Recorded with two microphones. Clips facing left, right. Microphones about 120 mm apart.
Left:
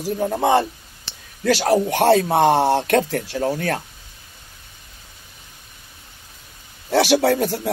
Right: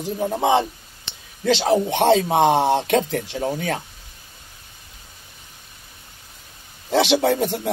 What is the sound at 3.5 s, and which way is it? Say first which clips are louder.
Speech: left 2 dB; 10° right (ahead or behind).